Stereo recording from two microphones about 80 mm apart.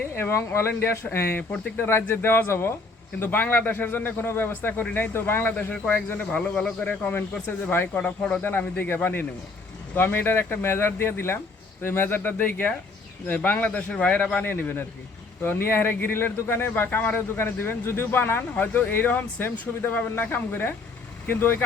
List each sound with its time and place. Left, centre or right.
0.1 s a man's voice: left; by 8.4 s centre
8.4 s a man's voice: left